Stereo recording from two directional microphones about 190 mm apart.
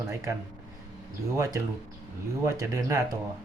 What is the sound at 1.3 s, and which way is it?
Speech, 20° right (ahead or behind).